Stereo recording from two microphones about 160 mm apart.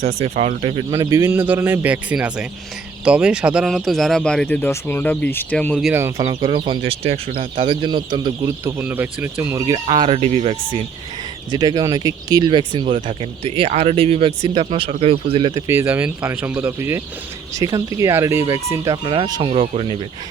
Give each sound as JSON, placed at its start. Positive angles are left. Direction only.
{"t": 0.2, "sound": "speech", "side_deg": -40}
{"t": 0.9, "sound": "speech", "side_deg": -20}
{"t": 5.9, "sound": "speech", "side_deg": -15}
{"t": 8.6, "sound": "speech", "side_deg": -10}
{"t": 9.8, "sound": "speech", "side_deg": -35}
{"t": 11.5, "sound": "speech", "side_deg": -25}
{"t": 15.5, "sound": "speech", "side_deg": -15}